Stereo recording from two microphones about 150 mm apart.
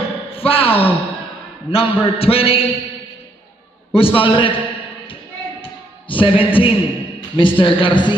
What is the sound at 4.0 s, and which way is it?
Speech, 35° left (ahead or behind).